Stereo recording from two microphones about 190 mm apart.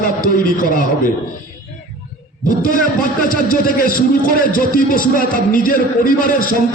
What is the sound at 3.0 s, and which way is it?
A man's voice, 45° left (ahead or behind).